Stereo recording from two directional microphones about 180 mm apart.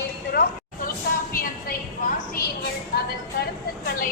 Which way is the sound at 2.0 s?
45° left (ahead or behind).